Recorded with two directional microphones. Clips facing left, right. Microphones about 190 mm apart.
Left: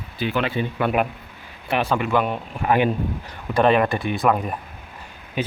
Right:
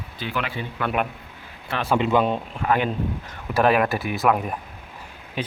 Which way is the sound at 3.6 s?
5° right (ahead or behind).